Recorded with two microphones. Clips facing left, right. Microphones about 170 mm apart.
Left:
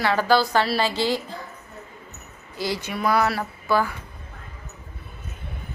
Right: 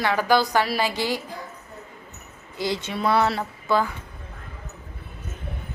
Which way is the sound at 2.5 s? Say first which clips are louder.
Right 1 dB; 20° right (ahead or behind).